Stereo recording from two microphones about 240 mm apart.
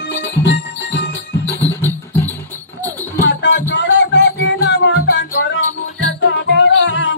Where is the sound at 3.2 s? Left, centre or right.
Left.